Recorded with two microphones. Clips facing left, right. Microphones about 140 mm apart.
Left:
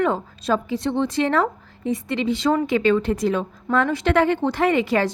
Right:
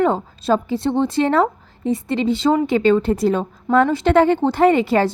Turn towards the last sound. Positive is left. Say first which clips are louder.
# right 5 dB
turn(degrees=-30)  # may be behind; listen again after turning